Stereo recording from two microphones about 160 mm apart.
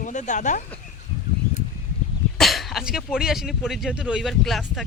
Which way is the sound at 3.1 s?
Centre (ahead or behind).